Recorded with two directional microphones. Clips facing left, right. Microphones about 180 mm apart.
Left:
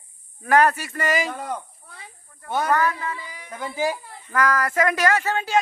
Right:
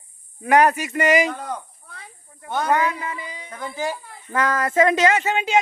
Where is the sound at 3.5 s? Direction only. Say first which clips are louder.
Left 2 dB; 5° left (ahead or behind).